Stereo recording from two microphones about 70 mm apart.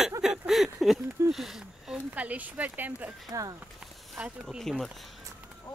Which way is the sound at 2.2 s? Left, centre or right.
Right.